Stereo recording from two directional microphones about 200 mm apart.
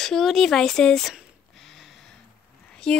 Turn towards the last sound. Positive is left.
turn(degrees=5)  # may be behind; listen again after turning